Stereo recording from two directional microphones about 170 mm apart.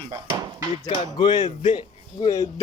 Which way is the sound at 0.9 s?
25° left (ahead or behind).